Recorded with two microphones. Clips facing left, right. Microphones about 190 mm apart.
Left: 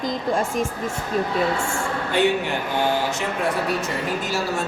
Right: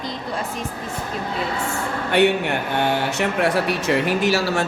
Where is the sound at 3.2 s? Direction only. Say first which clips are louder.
Right 4 dB; 80° right.